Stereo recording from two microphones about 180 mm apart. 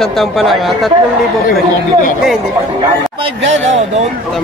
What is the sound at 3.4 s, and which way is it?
Speech, 40° right (ahead or behind).